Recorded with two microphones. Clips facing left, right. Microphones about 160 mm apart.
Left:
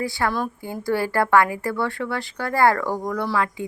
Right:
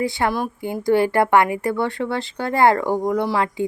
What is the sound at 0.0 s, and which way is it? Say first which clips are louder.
A woman's voice: right 3 dB; 20° right (ahead or behind).